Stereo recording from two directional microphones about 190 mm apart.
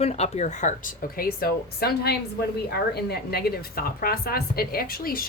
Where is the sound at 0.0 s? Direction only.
35° left (ahead or behind).